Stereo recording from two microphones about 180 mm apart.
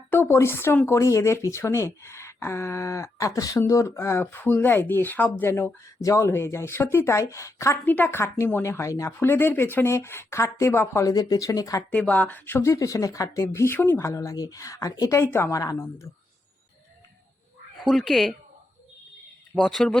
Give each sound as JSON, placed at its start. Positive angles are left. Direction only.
{"t": 0.1, "sound": "speech", "side_deg": 15}
{"t": 11.9, "sound": "speech", "side_deg": 5}
{"t": 17.7, "sound": "speech", "side_deg": 0}
{"t": 19.5, "sound": "speech", "side_deg": 5}